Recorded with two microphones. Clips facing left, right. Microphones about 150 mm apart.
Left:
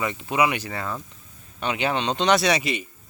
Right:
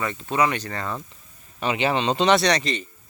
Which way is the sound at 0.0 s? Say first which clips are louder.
Even; 15° left (ahead or behind).